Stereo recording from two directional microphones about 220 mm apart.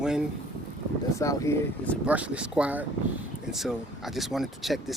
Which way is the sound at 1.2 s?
10° left (ahead or behind).